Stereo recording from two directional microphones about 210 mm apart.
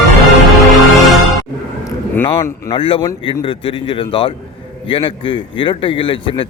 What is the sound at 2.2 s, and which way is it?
A man's voice, 25° left (ahead or behind).